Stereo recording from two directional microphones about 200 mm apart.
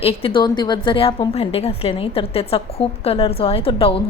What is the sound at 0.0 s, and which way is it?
A woman's voice, 30° left (ahead or behind).